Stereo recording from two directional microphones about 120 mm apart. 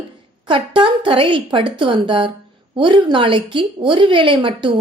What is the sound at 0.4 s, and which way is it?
A woman's voice, 45° right (ahead or behind).